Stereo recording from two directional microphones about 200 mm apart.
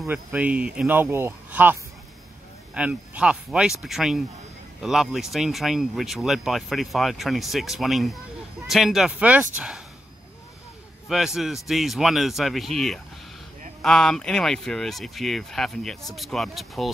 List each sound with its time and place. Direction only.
0.0 s speech: 10° right (ahead or behind)
11.1 s speech: centre (ahead or behind)